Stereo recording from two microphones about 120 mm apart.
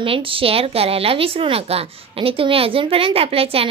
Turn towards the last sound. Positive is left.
turn(degrees=-55)  # may be behind; listen again after turning